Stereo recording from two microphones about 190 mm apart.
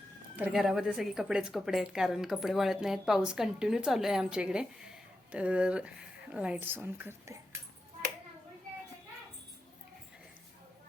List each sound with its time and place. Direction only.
0.3 s a woman's voice: 5° right (ahead or behind)